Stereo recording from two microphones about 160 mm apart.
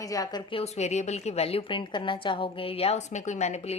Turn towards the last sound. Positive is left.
turn(degrees=45)  # may be behind; listen again after turning